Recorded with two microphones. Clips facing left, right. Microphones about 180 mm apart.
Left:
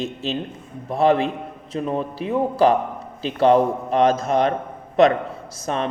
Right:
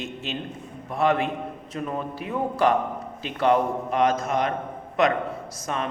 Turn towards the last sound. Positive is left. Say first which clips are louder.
# left 5 dB
turn(degrees=30)  # may be behind; listen again after turning